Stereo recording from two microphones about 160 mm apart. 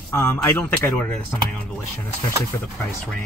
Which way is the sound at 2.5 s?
20° left (ahead or behind).